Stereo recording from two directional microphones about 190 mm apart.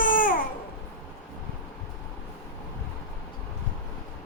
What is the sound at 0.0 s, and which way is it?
Babbling, 45° left (ahead or behind).